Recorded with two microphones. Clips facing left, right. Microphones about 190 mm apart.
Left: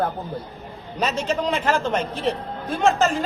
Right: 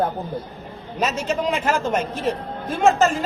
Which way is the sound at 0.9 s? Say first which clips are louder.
Even; 5° right (ahead or behind).